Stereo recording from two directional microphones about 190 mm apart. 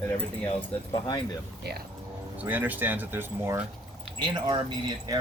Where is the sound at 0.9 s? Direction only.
25° left (ahead or behind).